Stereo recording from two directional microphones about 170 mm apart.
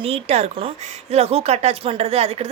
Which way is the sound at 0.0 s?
35° right (ahead or behind).